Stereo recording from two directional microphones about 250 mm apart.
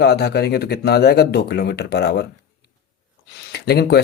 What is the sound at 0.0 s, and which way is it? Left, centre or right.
Speech, left.